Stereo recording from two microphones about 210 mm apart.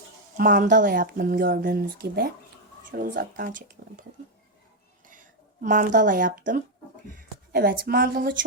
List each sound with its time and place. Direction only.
0.3 s speech: 40° right (ahead or behind)
5.6 s speech: 40° right (ahead or behind)